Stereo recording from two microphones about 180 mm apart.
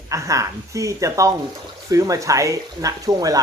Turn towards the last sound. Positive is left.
turn(degrees=-20)  # may be behind; listen again after turning